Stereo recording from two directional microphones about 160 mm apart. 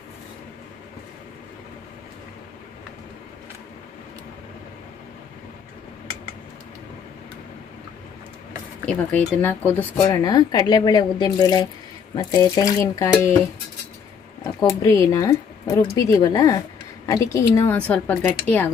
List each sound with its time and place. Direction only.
8.8 s speech: 10° left (ahead or behind)